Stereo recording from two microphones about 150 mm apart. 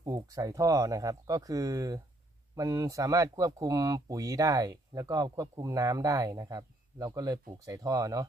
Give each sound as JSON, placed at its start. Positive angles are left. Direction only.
{"t": 0.0, "sound": "speech", "side_deg": -20}